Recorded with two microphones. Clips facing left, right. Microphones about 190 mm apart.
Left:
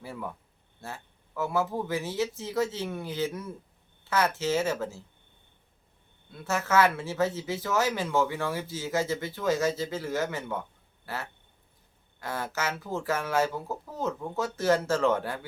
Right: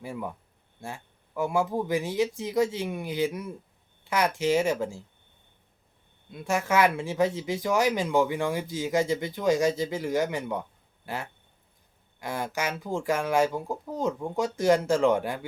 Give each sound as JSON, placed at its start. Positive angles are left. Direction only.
{"t": 0.0, "sound": "speech", "side_deg": -15}
{"t": 6.3, "sound": "speech", "side_deg": -15}